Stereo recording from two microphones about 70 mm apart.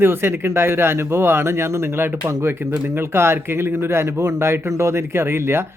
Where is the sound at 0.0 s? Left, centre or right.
Right.